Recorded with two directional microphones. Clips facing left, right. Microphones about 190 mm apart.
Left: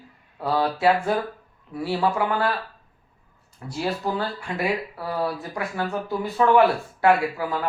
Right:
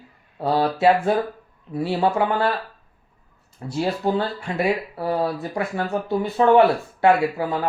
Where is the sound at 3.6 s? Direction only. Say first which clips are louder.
Right 4 dB; 25° right (ahead or behind).